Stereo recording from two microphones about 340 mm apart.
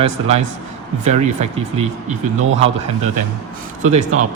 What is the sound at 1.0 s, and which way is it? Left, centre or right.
Speech, centre.